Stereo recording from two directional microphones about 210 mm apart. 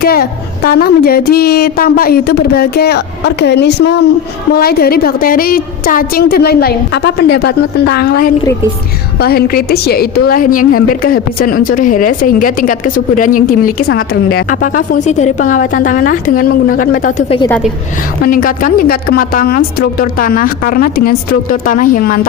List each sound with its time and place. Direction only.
0.0 s a woman's voice: 45° left (ahead or behind); by 17.5 s 25° left (ahead or behind)
18.3 s a woman's voice: 40° left (ahead or behind)